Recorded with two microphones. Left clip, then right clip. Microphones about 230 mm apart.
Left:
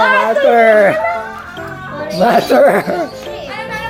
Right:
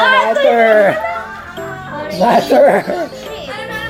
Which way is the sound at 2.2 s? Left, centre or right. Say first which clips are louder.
Even; left.